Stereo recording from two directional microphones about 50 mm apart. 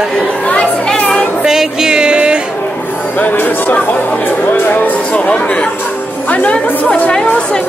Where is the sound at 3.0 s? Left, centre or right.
Left.